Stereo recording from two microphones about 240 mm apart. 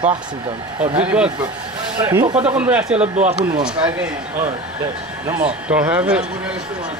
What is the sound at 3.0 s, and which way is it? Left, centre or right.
Speech, right.